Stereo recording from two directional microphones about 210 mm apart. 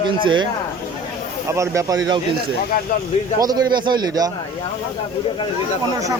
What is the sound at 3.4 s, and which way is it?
Speech, 20° right (ahead or behind).